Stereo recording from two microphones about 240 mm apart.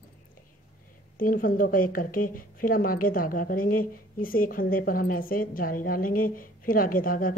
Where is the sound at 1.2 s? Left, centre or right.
Left.